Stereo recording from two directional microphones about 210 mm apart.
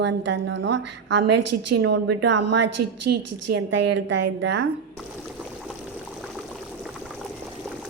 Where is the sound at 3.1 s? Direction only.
45° right (ahead or behind).